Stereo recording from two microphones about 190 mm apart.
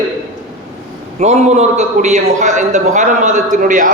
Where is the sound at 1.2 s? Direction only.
35° right (ahead or behind).